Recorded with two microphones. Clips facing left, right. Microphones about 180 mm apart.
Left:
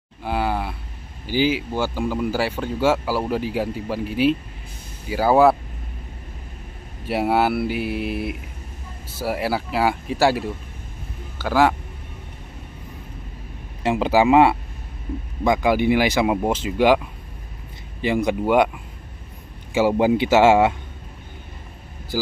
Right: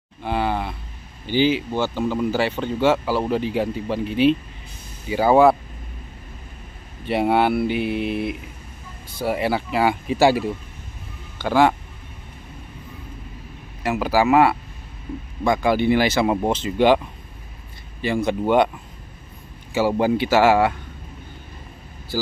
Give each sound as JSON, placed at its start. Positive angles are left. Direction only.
{"t": 0.2, "sound": "a sound", "side_deg": 5}
{"t": 1.2, "sound": "speech", "side_deg": 5}
{"t": 7.1, "sound": "speech", "side_deg": 5}
{"t": 13.8, "sound": "speech", "side_deg": 25}
{"t": 18.0, "sound": "speech", "side_deg": 15}
{"t": 19.7, "sound": "speech", "side_deg": 15}
{"t": 22.1, "sound": "speech", "side_deg": 15}